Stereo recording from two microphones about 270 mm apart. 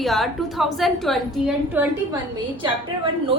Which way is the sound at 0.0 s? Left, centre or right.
Centre.